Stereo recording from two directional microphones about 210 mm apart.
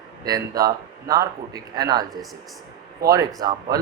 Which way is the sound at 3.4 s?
20° right (ahead or behind).